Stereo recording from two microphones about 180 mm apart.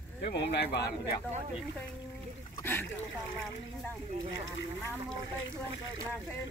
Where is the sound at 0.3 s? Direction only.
70° left (ahead or behind).